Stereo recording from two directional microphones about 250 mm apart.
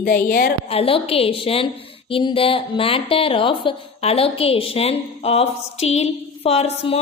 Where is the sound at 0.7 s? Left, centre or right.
Left.